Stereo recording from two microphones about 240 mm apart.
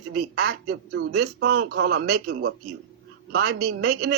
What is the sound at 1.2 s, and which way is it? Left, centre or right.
A man's voice, right.